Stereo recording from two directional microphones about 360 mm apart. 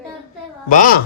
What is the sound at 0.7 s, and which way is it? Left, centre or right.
Speech, left.